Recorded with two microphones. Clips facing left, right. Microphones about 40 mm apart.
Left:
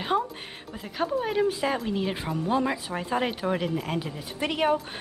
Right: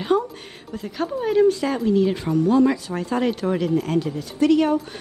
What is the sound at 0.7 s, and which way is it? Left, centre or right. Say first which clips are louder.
Speech: right 2 dB; centre.